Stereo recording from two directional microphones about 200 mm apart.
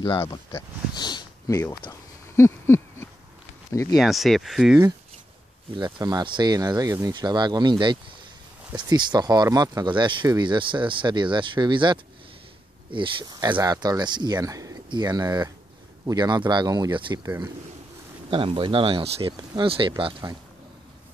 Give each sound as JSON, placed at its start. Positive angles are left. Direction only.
{"t": 0.0, "sound": "speech", "side_deg": 15}
{"t": 3.9, "sound": "speech", "side_deg": 0}
{"t": 5.8, "sound": "speech", "side_deg": -20}
{"t": 8.7, "sound": "speech", "side_deg": -20}
{"t": 18.3, "sound": "speech", "side_deg": -25}